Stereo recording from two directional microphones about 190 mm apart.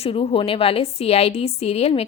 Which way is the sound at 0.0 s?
30° left (ahead or behind).